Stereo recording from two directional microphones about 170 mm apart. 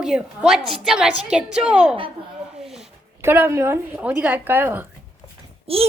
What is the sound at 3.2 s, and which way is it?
A woman's voice, 15° right (ahead or behind).